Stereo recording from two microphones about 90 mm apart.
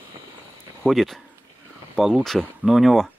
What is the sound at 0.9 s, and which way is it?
Speech, centre (ahead or behind).